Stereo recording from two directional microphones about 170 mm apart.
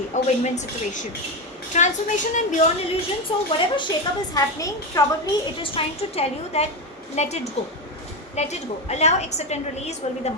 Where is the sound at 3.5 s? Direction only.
30° left (ahead or behind).